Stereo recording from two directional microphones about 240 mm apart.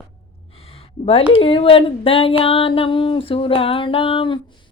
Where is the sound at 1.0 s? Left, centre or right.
Left.